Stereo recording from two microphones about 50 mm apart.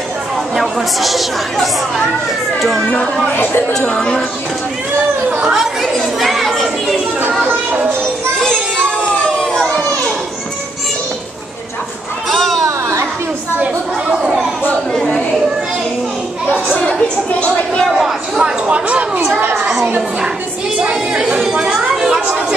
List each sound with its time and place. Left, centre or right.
0.6 s speech: centre
5.4 s chatter: centre
5.9 s children playing: centre
8.4 s children playing: centre
12.3 s children playing: centre
14.7 s a sound: centre
16.7 s chatter: left
17.9 s a sound: centre
18.4 s speech: right
20.9 s a sound: centre
21.9 s chatter: centre